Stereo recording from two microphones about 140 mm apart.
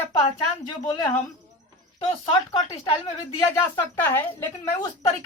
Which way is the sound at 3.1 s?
20° left (ahead or behind).